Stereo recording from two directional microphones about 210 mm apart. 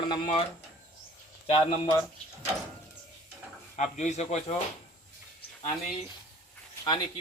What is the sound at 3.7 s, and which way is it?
Speech, 35° left (ahead or behind).